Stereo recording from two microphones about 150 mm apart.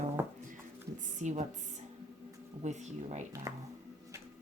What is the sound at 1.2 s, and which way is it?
Speech, 50° right (ahead or behind).